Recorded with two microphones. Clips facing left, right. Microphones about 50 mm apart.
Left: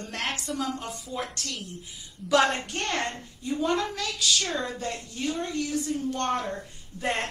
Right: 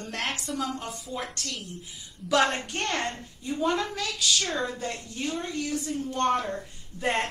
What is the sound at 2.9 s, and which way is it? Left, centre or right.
Speech, right.